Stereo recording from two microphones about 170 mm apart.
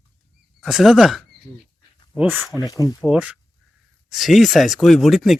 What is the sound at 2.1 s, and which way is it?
Speech, 10° right (ahead or behind).